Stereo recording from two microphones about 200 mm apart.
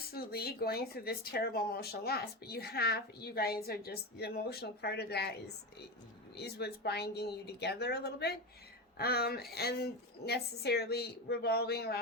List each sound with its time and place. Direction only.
0.1 s speech: 50° left (ahead or behind)
6.3 s speech: 55° left (ahead or behind)